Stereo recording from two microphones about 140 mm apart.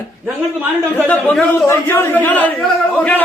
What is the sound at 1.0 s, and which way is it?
Speech, 10° left (ahead or behind).